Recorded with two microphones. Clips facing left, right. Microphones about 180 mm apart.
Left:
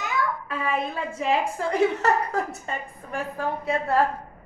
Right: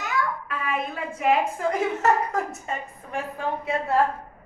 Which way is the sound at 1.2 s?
35° left (ahead or behind).